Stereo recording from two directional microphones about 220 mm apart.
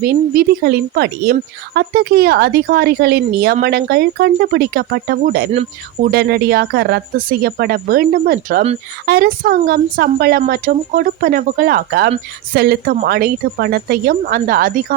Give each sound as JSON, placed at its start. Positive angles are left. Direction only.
{"t": 0.0, "sound": "a woman's voice", "side_deg": -45}